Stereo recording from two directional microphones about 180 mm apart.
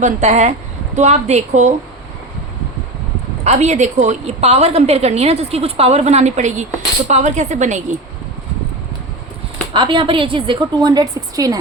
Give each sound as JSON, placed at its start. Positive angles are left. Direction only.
{"t": 0.0, "sound": "a woman's voice", "side_deg": -40}
{"t": 3.4, "sound": "a woman's voice", "side_deg": -40}
{"t": 9.7, "sound": "a woman's voice", "side_deg": -25}